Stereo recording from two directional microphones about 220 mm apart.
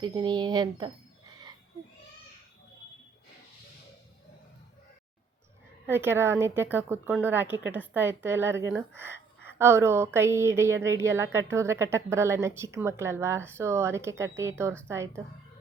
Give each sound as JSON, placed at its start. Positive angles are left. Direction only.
{"t": 0.0, "sound": "speech", "side_deg": -20}
{"t": 5.8, "sound": "a woman's voice", "side_deg": -10}